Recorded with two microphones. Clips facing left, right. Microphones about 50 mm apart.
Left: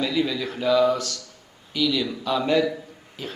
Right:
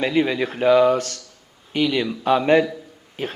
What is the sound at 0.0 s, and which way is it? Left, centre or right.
Speech, right.